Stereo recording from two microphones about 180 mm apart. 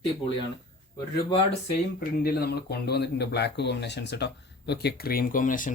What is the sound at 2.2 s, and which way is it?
Speech, 60° left (ahead or behind).